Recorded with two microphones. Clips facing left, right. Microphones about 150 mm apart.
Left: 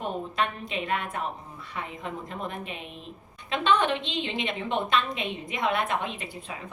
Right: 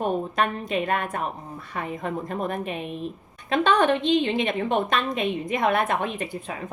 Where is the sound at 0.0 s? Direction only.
50° right (ahead or behind).